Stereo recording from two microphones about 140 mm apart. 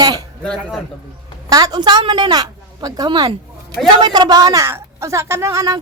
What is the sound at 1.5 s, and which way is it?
A woman's voice, 30° right (ahead or behind).